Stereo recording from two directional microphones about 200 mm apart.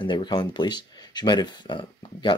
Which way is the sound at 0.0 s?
20° left (ahead or behind).